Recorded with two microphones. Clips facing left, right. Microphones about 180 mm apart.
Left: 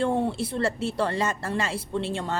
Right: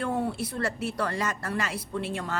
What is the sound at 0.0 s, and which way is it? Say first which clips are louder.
Speech: left 4 dB; 25° left (ahead or behind).